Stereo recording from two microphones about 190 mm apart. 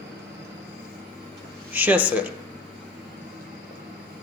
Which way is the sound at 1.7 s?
10° right (ahead or behind).